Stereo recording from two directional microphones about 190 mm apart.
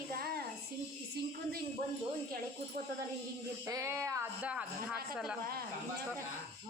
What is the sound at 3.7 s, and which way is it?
Speech, 15° right (ahead or behind).